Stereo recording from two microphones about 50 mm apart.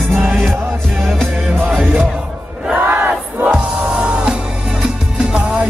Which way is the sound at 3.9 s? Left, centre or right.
Centre.